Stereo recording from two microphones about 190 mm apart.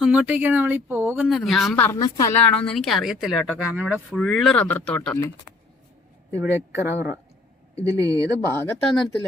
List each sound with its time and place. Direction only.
0.0 s speech: 5° right (ahead or behind); by 2.0 s 10° left (ahead or behind)
2.0 s a woman's voice: 20° left (ahead or behind)
2.5 s speech: 5° left (ahead or behind)
6.3 s speech: 15° right (ahead or behind)
8.5 s speech: 5° left (ahead or behind)